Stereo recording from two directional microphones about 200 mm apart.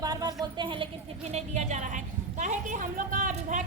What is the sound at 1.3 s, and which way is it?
A woman's voice, 35° right (ahead or behind).